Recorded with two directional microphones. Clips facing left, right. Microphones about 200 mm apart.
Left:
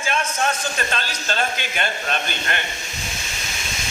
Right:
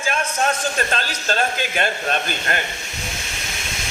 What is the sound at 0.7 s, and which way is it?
A man's voice, 40° right (ahead or behind).